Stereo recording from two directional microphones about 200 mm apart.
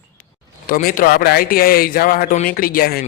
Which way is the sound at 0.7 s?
45° left (ahead or behind).